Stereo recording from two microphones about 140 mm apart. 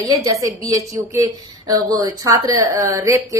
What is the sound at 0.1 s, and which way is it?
A woman's voice, 25° right (ahead or behind).